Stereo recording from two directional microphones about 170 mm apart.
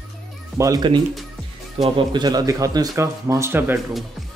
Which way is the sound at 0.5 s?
20° right (ahead or behind).